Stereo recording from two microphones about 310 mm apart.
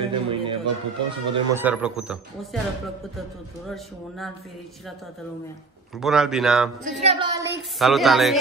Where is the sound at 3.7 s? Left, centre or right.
Centre.